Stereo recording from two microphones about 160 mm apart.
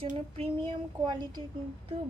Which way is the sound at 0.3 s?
30° right (ahead or behind).